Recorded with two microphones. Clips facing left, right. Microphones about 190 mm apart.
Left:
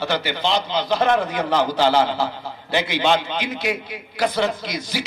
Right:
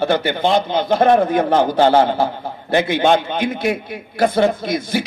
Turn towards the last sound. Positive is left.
turn(degrees=-55)  # may be behind; listen again after turning